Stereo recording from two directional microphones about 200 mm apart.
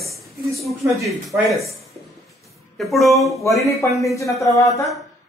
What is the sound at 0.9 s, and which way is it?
Speech, centre (ahead or behind).